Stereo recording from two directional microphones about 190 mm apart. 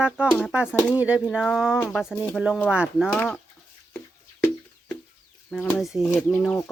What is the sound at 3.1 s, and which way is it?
Speech, 5° left (ahead or behind).